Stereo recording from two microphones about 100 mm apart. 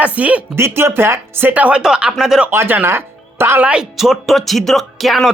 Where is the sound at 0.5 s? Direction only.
25° right (ahead or behind); by 2.5 s 5° right (ahead or behind).